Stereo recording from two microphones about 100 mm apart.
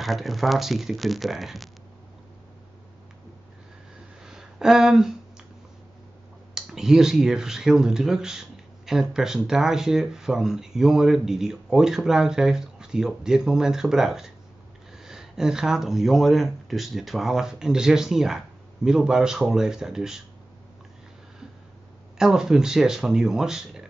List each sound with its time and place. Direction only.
0.0 s speech: centre (ahead or behind)
4.2 s a sound: 5° right (ahead or behind)
6.5 s speech: 5° right (ahead or behind)
22.2 s speech: 5° right (ahead or behind)